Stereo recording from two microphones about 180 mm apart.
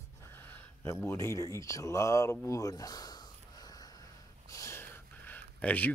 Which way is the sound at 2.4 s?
20° left (ahead or behind).